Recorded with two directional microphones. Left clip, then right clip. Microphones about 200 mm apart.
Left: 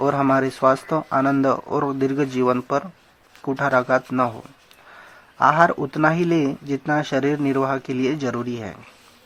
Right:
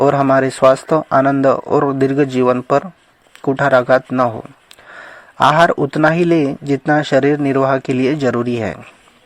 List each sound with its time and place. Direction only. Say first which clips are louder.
0.0 s a man's voice: right 7 dB; 35° right (ahead or behind)